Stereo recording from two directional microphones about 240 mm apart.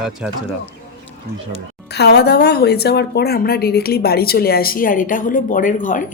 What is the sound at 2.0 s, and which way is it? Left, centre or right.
A woman's voice, left.